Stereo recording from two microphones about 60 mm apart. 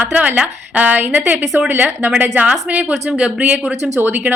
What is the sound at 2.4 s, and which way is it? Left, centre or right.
A woman's voice, right.